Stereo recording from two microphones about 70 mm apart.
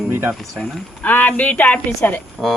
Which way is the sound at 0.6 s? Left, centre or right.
Left.